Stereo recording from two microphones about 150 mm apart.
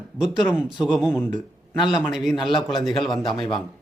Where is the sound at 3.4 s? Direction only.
35° left (ahead or behind).